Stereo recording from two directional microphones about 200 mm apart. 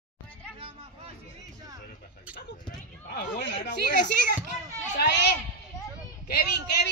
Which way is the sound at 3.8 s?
40° left (ahead or behind).